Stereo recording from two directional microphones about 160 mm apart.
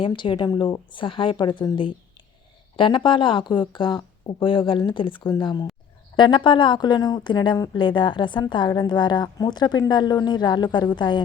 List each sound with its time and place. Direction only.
0.0 s speech: 30° left (ahead or behind)